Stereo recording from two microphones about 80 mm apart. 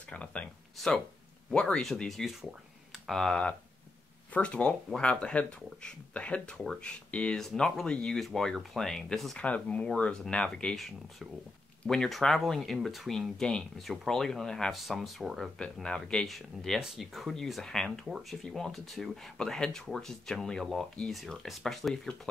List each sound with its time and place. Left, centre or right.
0.1 s speech: centre
9.4 s speech: centre
15.6 s speech: centre
18.0 s speech: centre